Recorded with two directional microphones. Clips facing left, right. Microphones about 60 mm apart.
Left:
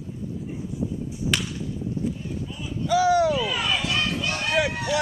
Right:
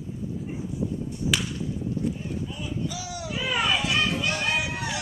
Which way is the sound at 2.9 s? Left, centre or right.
Left.